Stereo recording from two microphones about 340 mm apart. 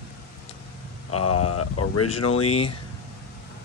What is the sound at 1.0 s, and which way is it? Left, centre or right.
Speech, left.